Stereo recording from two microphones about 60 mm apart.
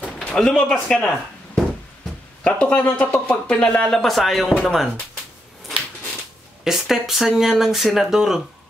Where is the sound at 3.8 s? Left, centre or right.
Centre.